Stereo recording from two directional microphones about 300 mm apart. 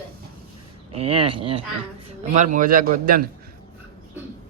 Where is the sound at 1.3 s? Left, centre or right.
Centre.